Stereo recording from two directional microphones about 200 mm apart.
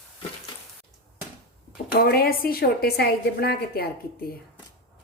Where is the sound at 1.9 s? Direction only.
50° left (ahead or behind).